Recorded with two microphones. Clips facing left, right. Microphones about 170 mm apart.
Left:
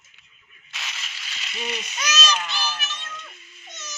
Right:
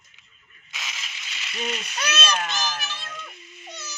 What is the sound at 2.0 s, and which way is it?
A child's voice, 55° right (ahead or behind).